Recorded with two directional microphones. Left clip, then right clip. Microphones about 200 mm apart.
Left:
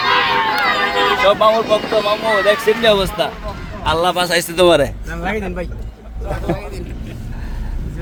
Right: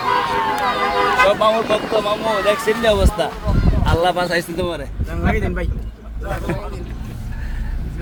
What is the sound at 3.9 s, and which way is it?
Speech, 30° left (ahead or behind).